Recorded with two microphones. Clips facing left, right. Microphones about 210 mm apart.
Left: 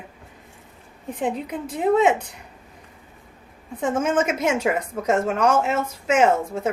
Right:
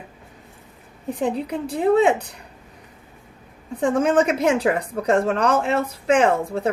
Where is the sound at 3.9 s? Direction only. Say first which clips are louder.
Right 3 dB; 35° right (ahead or behind).